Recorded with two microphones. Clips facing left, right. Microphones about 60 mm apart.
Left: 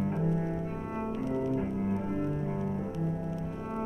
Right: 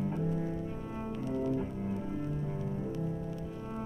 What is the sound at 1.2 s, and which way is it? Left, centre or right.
Music, left.